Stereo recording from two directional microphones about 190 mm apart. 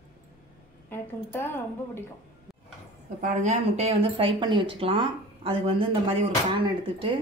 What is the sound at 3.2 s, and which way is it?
Speech, 40° right (ahead or behind).